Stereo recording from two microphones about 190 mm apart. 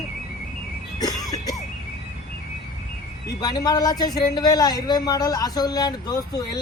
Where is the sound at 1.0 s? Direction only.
20° left (ahead or behind).